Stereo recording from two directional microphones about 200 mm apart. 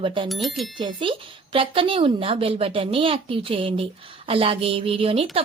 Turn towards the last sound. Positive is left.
turn(degrees=-30)  # may be behind; listen again after turning